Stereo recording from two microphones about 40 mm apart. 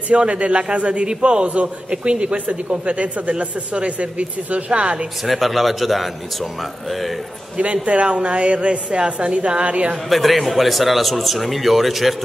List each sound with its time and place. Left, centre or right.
0.1 s a man's voice: right
5.2 s speech: centre
7.5 s a woman's voice: right
10.0 s speech: centre